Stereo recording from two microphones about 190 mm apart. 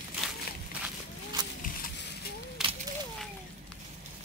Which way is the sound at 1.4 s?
20° right (ahead or behind).